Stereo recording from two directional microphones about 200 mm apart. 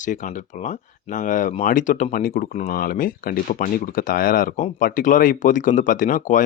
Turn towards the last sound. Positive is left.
turn(degrees=40)  # may be behind; listen again after turning